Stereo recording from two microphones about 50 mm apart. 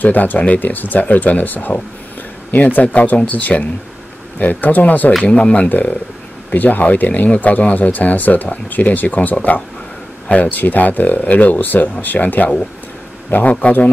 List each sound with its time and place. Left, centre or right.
0.0 s speech: left
10.2 s speech: left
10.5 s speech: left